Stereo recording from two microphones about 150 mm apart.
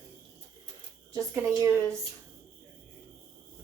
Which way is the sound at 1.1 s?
20° right (ahead or behind).